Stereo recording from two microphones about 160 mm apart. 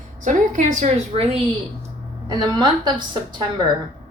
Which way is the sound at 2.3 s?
25° right (ahead or behind).